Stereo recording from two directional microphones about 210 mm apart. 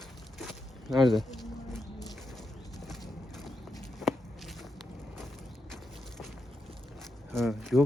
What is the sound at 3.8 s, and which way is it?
Walk, centre (ahead or behind).